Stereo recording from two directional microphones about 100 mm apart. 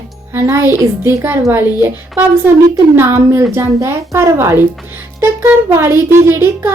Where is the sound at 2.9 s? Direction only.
25° right (ahead or behind).